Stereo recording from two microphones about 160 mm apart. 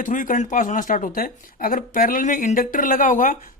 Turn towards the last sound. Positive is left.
turn(degrees=55)  # may be behind; listen again after turning